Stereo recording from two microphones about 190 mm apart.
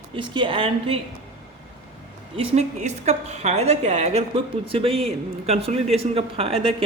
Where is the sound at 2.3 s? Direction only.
35° right (ahead or behind).